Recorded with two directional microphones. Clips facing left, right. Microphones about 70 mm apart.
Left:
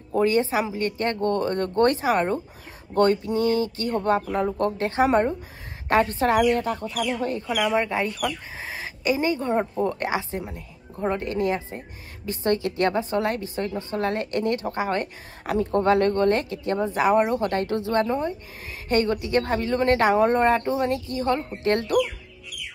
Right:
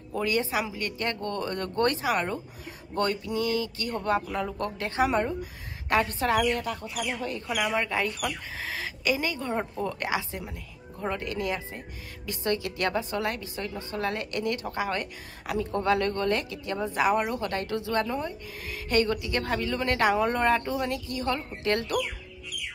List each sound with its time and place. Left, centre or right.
0.1 s a woman's voice: left
8.5 s a sound: left
9.8 s a woman's voice: left